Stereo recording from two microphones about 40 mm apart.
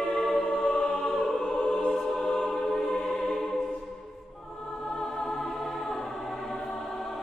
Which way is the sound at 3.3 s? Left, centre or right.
Left.